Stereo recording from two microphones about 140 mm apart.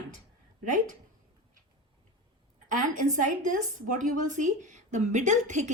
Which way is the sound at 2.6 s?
65° right (ahead or behind).